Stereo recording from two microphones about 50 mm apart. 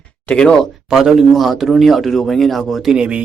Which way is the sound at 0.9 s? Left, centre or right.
Centre.